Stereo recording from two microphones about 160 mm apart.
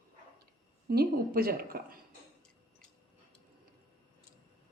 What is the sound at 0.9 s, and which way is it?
Speech, 75° right (ahead or behind).